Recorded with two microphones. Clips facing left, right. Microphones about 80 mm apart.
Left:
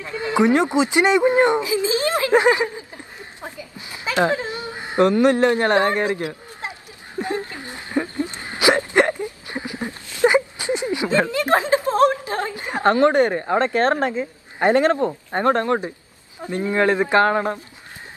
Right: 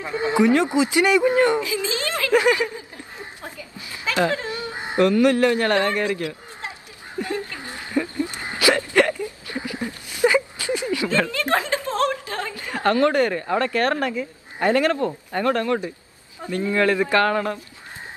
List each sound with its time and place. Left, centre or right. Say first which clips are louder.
0.0 s speech: right 2 dB; right
0.4 s speech: left 1 dB; left
3.4 s a sound: left 2 dB; left
10.2 s speech: left 2 dB; left